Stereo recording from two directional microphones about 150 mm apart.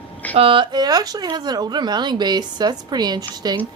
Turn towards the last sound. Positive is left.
turn(degrees=-25)  # may be behind; listen again after turning